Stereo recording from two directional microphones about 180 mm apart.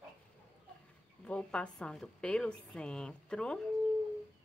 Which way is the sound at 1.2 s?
5° left (ahead or behind).